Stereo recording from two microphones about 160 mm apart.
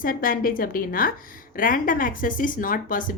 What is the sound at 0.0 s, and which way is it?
A woman's voice, 60° left (ahead or behind).